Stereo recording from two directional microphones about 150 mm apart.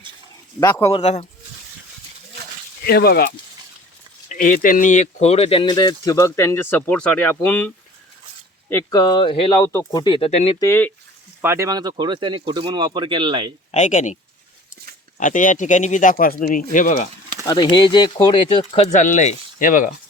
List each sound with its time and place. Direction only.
0.6 s speech: 20° left (ahead or behind)
1.0 s speech: 50° left (ahead or behind)
2.8 s speech: 90° left
4.3 s speech: 60° left (ahead or behind); by 7.7 s 10° left (ahead or behind)
8.7 s speech: 25° left (ahead or behind)
9.6 s speech: 25° left (ahead or behind); by 10.5 s 40° left (ahead or behind)
10.6 s speech: 15° left (ahead or behind)
11.4 s speech: 20° right (ahead or behind)
13.7 s speech: 55° left (ahead or behind)
15.2 s speech: 60° left (ahead or behind)
17.4 s speech: 30° left (ahead or behind)
18.9 s speech: 55° left (ahead or behind)